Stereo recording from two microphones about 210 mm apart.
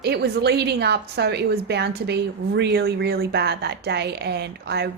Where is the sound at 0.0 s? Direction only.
50° right (ahead or behind).